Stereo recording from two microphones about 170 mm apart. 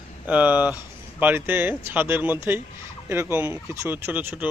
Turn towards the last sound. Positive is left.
turn(degrees=-10)  # may be behind; listen again after turning